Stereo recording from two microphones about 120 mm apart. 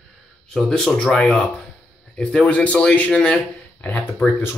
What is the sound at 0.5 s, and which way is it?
Speech, 5° left (ahead or behind).